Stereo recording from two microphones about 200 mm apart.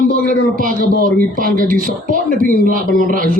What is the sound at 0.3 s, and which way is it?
A woman's voice, 40° right (ahead or behind).